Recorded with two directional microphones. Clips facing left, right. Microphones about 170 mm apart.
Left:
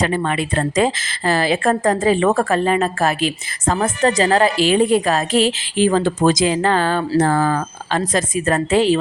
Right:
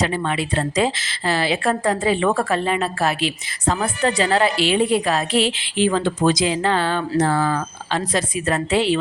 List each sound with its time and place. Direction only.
0.0 s a woman's voice: 50° left (ahead or behind)